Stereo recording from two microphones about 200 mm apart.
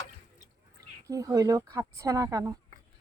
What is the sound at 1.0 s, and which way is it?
Speech, 15° right (ahead or behind).